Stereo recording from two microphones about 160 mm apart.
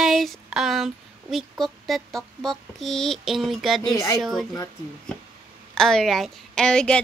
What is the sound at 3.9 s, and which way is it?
Speech, 20° left (ahead or behind).